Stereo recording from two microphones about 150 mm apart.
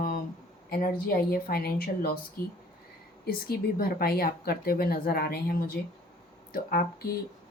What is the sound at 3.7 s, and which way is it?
Speech, 85° left.